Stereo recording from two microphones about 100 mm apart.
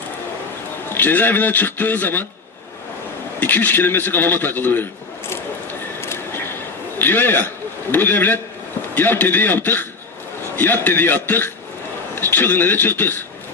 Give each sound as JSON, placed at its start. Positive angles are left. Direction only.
{"t": 0.9, "sound": "a man's voice", "side_deg": 20}
{"t": 3.4, "sound": "a man's voice", "side_deg": 20}
{"t": 6.0, "sound": "a sound", "side_deg": 25}
{"t": 7.0, "sound": "a man's voice", "side_deg": 20}